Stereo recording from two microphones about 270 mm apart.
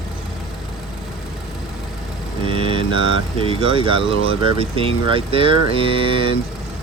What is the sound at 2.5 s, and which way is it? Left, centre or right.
Speech, centre.